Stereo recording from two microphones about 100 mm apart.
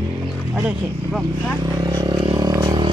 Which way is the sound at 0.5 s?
10° right (ahead or behind).